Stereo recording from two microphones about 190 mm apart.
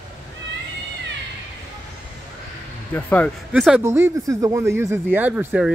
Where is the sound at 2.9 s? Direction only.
10° left (ahead or behind).